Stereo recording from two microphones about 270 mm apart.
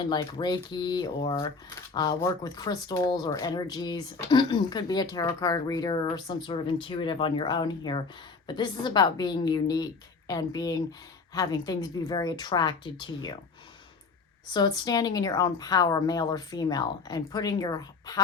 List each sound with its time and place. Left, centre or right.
0.1 s speech: centre
14.5 s speech: centre